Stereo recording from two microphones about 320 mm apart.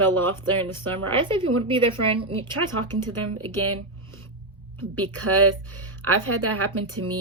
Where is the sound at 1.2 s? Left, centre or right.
Centre.